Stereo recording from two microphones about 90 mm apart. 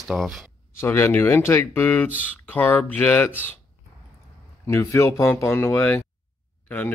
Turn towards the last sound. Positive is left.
turn(degrees=20)  # may be behind; listen again after turning